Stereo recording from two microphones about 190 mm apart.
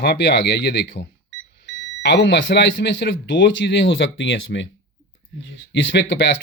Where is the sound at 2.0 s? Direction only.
65° left (ahead or behind).